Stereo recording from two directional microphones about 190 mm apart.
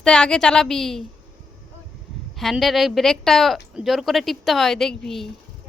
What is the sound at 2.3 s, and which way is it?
A woman's voice, centre (ahead or behind).